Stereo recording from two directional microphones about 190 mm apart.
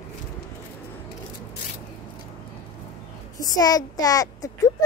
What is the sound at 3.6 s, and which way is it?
Speech, 20° left (ahead or behind).